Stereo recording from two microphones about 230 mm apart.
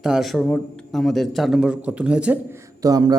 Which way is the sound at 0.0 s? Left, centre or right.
Centre.